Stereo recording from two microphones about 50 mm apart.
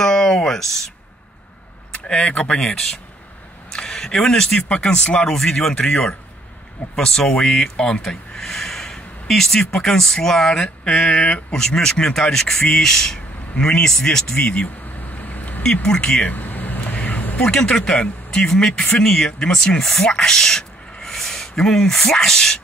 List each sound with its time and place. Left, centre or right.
0.0 s a sound: centre
1.9 s speech: left
3.7 s speech: centre
7.0 s speech: centre
15.2 s a sound: left
15.6 s speech: centre
16.2 s vehicle: left
17.4 s speech: centre